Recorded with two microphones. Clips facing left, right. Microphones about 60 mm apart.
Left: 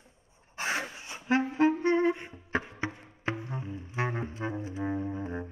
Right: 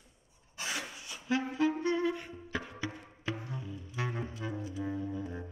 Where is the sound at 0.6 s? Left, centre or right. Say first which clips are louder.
Left 6 dB; left.